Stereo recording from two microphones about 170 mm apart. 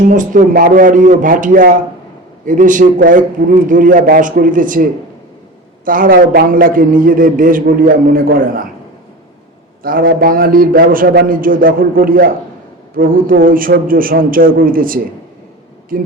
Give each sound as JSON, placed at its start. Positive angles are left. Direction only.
{"t": 0.1, "sound": "a man's voice", "side_deg": -50}
{"t": 9.8, "sound": "a man's voice", "side_deg": -55}